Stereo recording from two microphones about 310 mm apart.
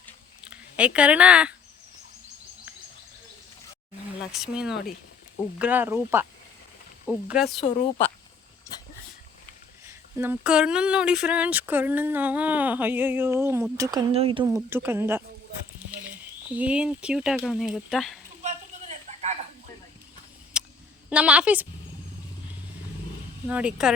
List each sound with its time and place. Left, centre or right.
0.0 s a sound: centre
4.2 s speech: centre
7.3 s speech: centre
7.6 s speech: left
9.8 s speech: centre
16.6 s speech: centre
18.4 s a sound: right
20.5 s a sound: centre
21.1 s speech: centre
23.5 s speech: centre